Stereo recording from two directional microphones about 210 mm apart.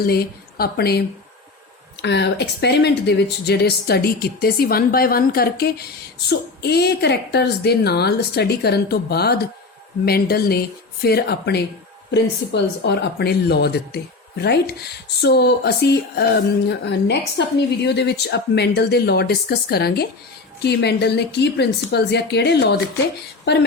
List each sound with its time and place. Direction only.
0.0 s speech: 45° left (ahead or behind)